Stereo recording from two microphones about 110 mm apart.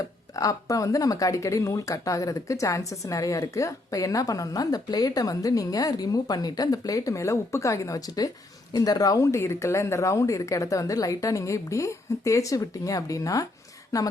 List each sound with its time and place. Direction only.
0.0 s speech: 30° left (ahead or behind)